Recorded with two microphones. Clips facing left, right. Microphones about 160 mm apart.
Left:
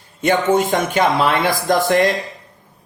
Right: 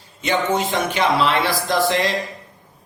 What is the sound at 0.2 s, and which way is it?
A man's voice, 50° left (ahead or behind).